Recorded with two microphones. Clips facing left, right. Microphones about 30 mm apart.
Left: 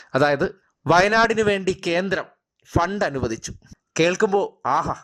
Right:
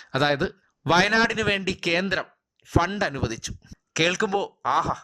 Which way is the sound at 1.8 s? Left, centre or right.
Right.